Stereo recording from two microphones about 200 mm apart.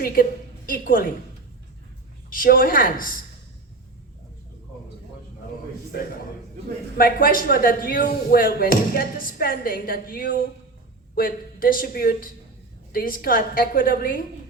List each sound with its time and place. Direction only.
0.0 s a woman's voice: 45° left (ahead or behind)
2.3 s speech: 45° left (ahead or behind)
6.9 s speech: 45° left (ahead or behind)